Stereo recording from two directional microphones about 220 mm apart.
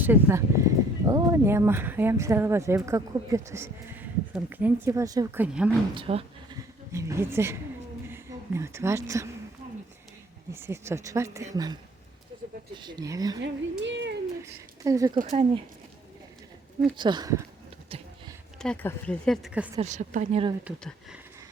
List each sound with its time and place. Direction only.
0.0 s speech: 10° right (ahead or behind)
5.9 s speech: 25° right (ahead or behind)
6.9 s a woman's voice: 15° right (ahead or behind)
10.5 s speech: 10° right (ahead or behind)
13.4 s speech: 55° right (ahead or behind)
14.4 s speech: 15° right (ahead or behind)
15.1 s speech: 35° right (ahead or behind)
16.9 s speech: 20° right (ahead or behind)
18.6 s speech: 5° left (ahead or behind)
19.7 s speech: 30° right (ahead or behind)
20.7 s speech: 5° right (ahead or behind)